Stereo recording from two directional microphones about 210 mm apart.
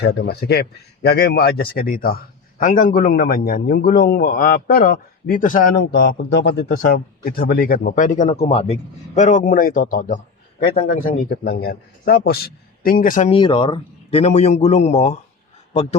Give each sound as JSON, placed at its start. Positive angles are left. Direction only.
{"t": 0.0, "sound": "speech", "side_deg": 50}
{"t": 6.4, "sound": "speech", "side_deg": 50}
{"t": 13.4, "sound": "a man's voice", "side_deg": 20}